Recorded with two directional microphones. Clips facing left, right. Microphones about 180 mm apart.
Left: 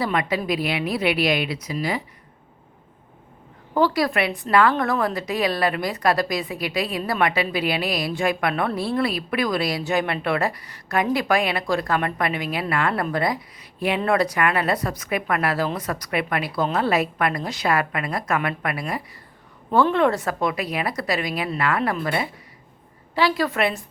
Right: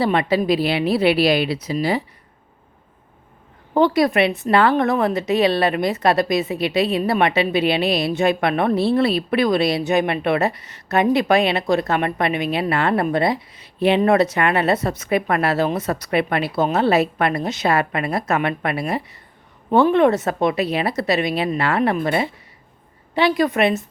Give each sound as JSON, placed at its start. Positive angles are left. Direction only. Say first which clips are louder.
{"t": 0.0, "sound": "a woman's voice", "louder": "right 5 dB", "side_deg": -30}
{"t": 3.8, "sound": "a woman's voice", "louder": "right 4 dB", "side_deg": -20}